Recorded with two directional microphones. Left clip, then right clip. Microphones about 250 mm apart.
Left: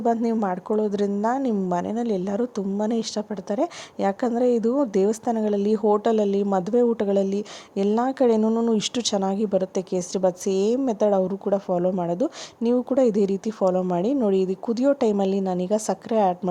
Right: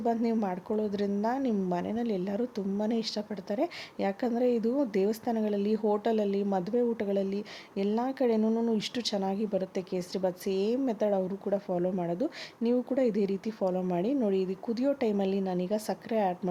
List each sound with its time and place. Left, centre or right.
0.0 s a woman's voice: centre